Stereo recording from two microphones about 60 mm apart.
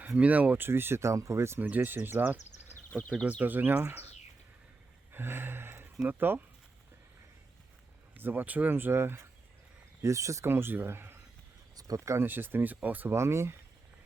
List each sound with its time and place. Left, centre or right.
0.2 s speech: right
0.7 s speech: right
1.0 s speech: right
1.6 s speech: right
3.8 s speech: right
5.1 s speech: right
8.1 s speech: right
10.0 s speech: right
10.4 s speech: right
11.8 s speech: right
12.2 s speech: right
13.1 s speech: right